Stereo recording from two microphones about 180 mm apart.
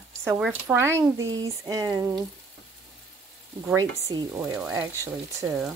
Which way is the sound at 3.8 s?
20° right (ahead or behind).